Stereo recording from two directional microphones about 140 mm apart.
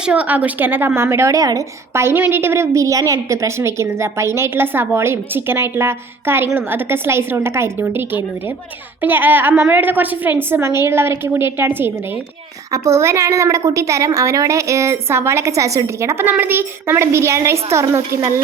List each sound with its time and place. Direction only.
0.0 s a woman's voice: 10° right (ahead or behind)